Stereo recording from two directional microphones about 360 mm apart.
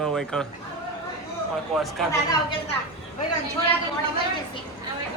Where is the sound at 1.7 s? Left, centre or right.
Centre.